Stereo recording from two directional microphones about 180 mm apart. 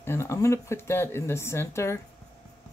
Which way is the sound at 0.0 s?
15° left (ahead or behind).